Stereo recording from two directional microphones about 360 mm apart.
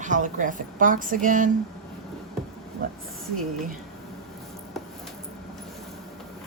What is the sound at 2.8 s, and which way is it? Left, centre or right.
Speech, right.